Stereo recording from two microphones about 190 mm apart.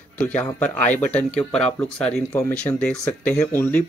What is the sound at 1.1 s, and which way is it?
Speech, 5° left (ahead or behind).